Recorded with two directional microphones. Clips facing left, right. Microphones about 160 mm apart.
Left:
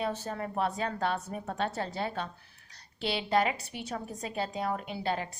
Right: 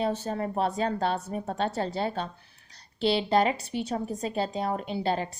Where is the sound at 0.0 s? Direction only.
30° right (ahead or behind).